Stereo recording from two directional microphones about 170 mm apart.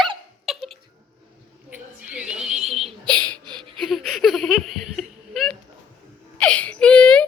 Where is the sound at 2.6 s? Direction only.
35° right (ahead or behind).